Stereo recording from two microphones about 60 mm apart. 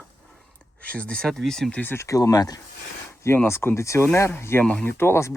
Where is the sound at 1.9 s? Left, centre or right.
Left.